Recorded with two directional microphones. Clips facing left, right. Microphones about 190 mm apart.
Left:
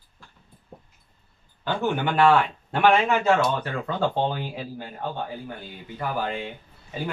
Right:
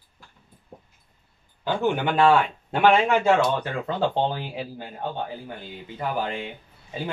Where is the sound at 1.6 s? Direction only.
15° right (ahead or behind).